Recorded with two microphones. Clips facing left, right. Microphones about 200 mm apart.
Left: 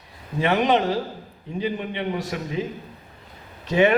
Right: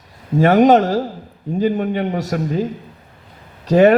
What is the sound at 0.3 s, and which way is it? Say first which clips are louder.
A man's voice: right 9 dB; 45° right (ahead or behind).